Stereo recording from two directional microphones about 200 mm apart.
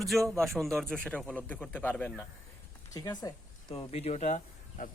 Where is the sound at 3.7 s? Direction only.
30° left (ahead or behind).